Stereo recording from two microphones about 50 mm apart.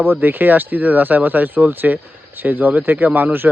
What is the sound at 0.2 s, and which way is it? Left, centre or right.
Speech, right.